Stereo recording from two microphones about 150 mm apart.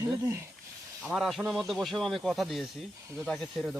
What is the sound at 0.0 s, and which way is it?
Speech, 20° right (ahead or behind).